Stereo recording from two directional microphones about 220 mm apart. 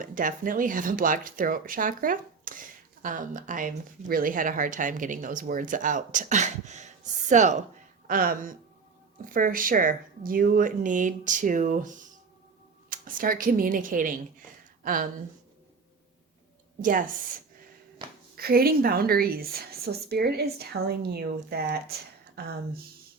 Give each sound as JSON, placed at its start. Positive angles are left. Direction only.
{"t": 0.0, "sound": "speech", "side_deg": -35}
{"t": 12.9, "sound": "speech", "side_deg": -40}
{"t": 18.3, "sound": "a woman's voice", "side_deg": -45}